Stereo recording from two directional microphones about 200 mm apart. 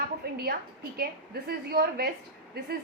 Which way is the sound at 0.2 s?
50° right (ahead or behind).